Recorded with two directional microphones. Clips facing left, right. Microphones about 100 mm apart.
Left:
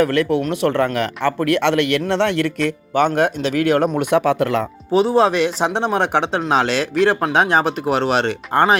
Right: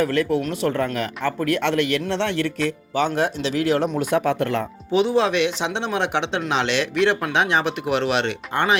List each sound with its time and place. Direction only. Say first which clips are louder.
0.0 s a man's voice: left 4 dB; 65° left (ahead or behind); by 4.6 s 90° left
4.9 s speech: left 4 dB; 40° left (ahead or behind)